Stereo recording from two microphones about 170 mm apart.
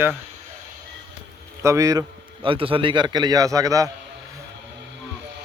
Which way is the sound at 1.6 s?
20° right (ahead or behind).